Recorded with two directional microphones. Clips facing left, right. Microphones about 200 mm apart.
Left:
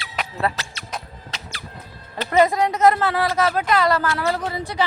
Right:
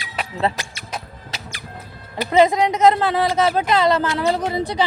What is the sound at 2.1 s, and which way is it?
A woman's voice, 15° right (ahead or behind).